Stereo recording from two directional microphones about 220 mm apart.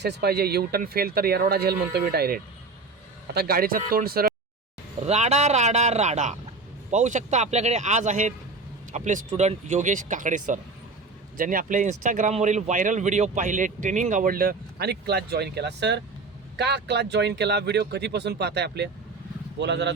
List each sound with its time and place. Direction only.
0.0 s speech: 45° right (ahead or behind)
5.0 s speech: 30° right (ahead or behind); by 19.9 s 50° right (ahead or behind)